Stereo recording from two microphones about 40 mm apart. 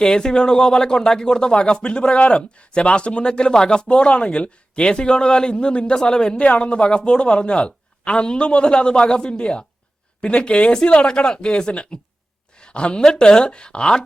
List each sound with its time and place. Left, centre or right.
0.0 s speech: centre
6.3 s speech: left
12.5 s a sound: left
13.1 s speech: left